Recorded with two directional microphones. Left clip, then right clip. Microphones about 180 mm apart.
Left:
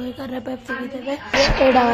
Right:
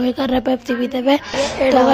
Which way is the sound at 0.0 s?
40° right (ahead or behind).